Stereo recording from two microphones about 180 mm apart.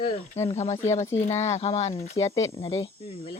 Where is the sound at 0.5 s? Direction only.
40° left (ahead or behind).